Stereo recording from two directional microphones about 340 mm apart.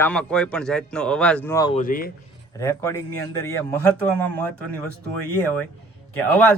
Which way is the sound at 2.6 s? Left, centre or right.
Centre.